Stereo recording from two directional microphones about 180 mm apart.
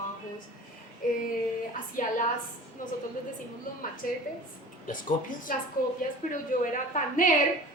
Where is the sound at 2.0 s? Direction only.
45° left (ahead or behind).